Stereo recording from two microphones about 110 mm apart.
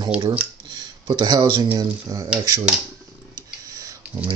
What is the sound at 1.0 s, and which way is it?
Speech, 40° right (ahead or behind).